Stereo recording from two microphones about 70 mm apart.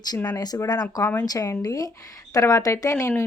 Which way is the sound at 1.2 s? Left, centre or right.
Left.